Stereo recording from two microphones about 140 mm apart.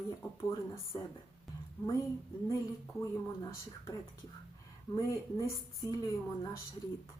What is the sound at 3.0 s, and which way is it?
Speech, 20° left (ahead or behind).